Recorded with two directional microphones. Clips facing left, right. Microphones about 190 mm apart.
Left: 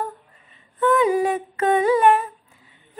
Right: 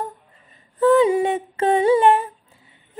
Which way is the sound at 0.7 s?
30° right (ahead or behind).